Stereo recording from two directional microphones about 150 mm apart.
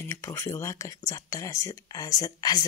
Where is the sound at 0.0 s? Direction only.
15° left (ahead or behind).